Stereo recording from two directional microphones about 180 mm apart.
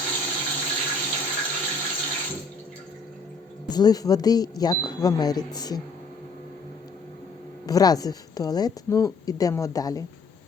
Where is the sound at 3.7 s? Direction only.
20° left (ahead or behind).